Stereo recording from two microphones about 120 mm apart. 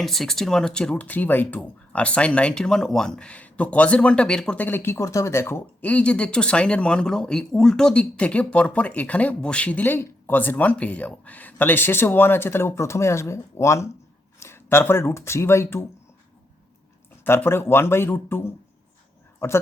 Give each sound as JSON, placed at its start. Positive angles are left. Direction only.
{"t": 0.0, "sound": "speech", "side_deg": 0}
{"t": 17.2, "sound": "speech", "side_deg": 20}